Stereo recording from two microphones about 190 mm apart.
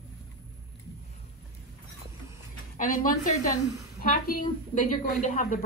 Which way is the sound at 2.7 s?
45° left (ahead or behind).